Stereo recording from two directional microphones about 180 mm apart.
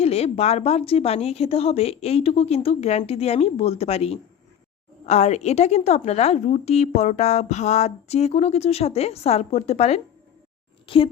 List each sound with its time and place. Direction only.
0.0 s a woman's voice: 35° left (ahead or behind)